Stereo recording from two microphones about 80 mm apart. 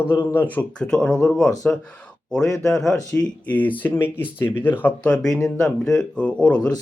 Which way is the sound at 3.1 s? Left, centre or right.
Centre.